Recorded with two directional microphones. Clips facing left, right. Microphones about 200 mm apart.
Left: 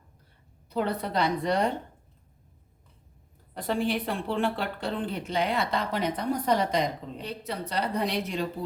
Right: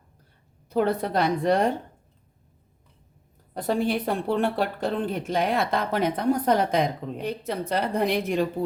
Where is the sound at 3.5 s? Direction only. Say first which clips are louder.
Right 3 dB; 45° right (ahead or behind).